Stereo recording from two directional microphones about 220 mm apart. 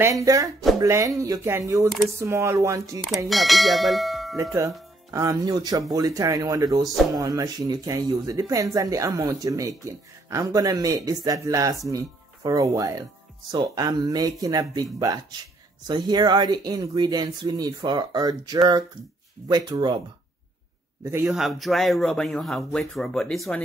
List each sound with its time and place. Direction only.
0.0 s speech: 15° right (ahead or behind)
3.3 s a man's voice: centre (ahead or behind)
5.1 s speech: 15° right (ahead or behind)
21.0 s a man's voice: 10° right (ahead or behind)